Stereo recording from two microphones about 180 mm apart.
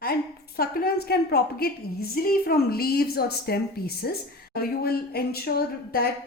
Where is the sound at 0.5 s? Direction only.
55° left (ahead or behind).